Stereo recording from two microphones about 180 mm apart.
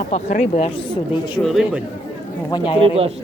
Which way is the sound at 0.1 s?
40° left (ahead or behind).